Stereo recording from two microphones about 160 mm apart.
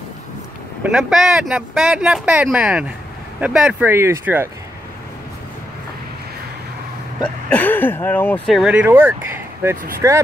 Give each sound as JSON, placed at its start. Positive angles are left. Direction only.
{"t": 0.8, "sound": "speech", "side_deg": 0}
{"t": 7.4, "sound": "speech", "side_deg": 10}
{"t": 8.5, "sound": "speech", "side_deg": 0}